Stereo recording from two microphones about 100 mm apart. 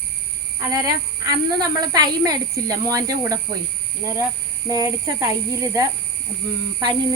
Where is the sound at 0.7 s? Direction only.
35° right (ahead or behind).